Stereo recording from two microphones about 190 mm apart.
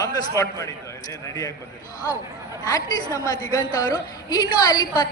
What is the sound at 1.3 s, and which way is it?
Speech, 15° left (ahead or behind).